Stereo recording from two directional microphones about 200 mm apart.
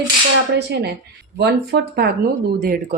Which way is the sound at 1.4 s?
55° right (ahead or behind).